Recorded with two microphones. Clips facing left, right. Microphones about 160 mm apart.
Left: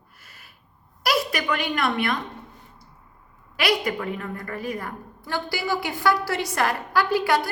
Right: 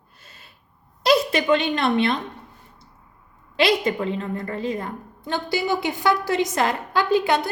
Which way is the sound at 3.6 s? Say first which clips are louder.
Right 4 dB; 25° right (ahead or behind).